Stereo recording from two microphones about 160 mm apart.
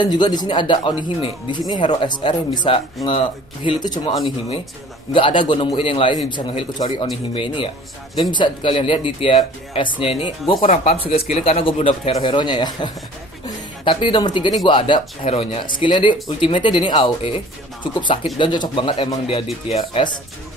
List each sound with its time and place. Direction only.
0.0 s speech: 25° left (ahead or behind)
5.1 s speech: 30° left (ahead or behind)